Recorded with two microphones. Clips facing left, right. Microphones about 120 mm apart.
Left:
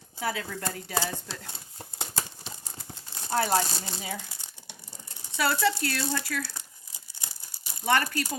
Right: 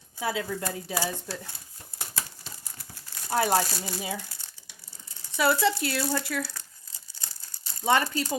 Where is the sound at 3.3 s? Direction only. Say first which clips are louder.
Right 1 dB; 15° right (ahead or behind).